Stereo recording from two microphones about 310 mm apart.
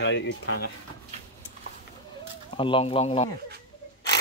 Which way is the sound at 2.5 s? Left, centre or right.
Centre.